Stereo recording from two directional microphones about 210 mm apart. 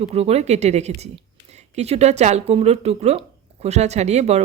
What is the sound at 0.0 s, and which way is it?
Speech, 30° right (ahead or behind).